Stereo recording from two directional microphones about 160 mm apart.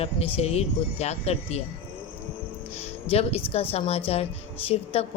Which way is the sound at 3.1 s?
40° left (ahead or behind).